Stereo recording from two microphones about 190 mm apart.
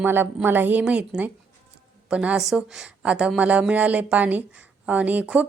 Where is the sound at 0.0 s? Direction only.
10° right (ahead or behind).